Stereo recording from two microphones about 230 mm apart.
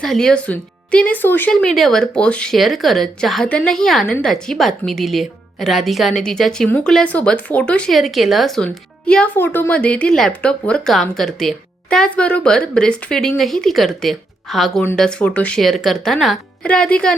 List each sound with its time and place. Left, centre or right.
0.0 s speech: centre